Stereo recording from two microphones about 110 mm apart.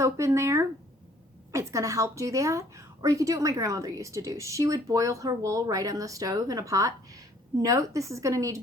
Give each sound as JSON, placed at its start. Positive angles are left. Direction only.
{"t": 0.0, "sound": "a woman's voice", "side_deg": -25}